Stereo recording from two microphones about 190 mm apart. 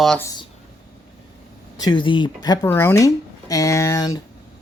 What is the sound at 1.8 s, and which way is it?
Speech, 25° left (ahead or behind).